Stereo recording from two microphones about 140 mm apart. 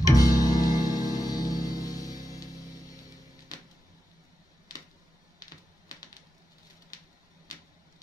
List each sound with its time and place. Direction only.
0.0 s music: 25° left (ahead or behind)
5.4 s typing: 25° left (ahead or behind)